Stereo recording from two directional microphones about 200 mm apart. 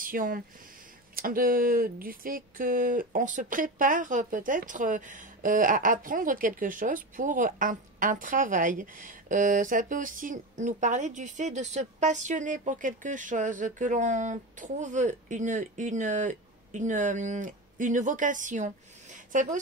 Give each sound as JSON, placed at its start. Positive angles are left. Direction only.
{"t": 0.0, "sound": "speech", "side_deg": -45}